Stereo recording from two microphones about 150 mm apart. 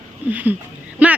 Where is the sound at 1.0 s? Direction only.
10° right (ahead or behind).